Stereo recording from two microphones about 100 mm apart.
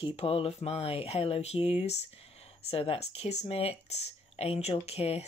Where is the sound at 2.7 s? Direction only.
70° left (ahead or behind).